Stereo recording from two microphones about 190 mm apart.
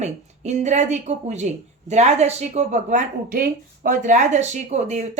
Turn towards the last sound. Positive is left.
turn(degrees=-35)  # may be behind; listen again after turning